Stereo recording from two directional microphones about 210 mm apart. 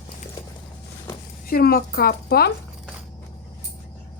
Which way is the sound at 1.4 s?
45° left (ahead or behind).